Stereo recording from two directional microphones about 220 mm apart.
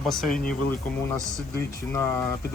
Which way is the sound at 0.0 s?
Centre (ahead or behind).